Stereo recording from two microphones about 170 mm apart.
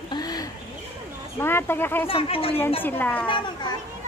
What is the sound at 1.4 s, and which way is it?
Speech, 15° left (ahead or behind).